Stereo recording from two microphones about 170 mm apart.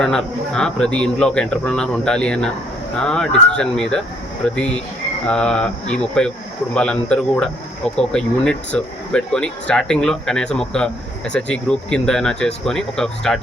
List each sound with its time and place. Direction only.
0.0 s speech: 5° left (ahead or behind)